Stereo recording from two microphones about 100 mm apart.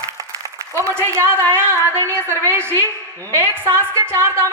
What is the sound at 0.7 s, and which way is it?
A woman's voice, 25° right (ahead or behind).